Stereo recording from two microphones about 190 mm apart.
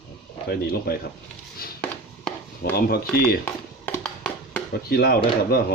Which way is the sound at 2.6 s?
60° left (ahead or behind).